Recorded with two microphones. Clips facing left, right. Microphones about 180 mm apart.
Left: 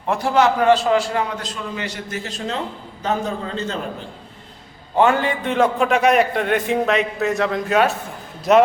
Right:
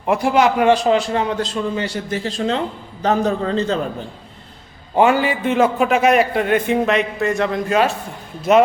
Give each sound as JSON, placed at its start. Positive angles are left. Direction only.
{"t": 0.1, "sound": "a man's voice", "side_deg": -10}
{"t": 4.9, "sound": "a man's voice", "side_deg": -10}